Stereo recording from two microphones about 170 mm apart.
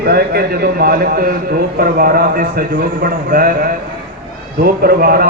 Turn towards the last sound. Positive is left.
turn(degrees=-60)  # may be behind; listen again after turning